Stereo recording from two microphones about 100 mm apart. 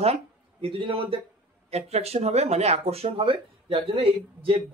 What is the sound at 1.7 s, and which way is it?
Speech, 90° right.